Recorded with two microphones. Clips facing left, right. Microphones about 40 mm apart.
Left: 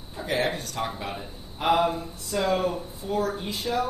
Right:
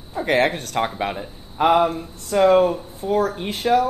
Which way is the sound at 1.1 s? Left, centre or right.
Right.